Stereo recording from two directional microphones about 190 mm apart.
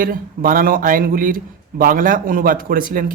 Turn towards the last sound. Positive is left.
turn(degrees=-50)  # may be behind; listen again after turning